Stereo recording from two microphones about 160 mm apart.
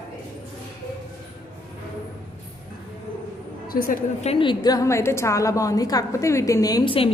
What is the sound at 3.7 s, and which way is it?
Speech, 65° left (ahead or behind).